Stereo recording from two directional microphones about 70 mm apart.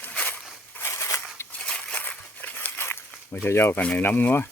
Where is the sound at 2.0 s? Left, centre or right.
Left.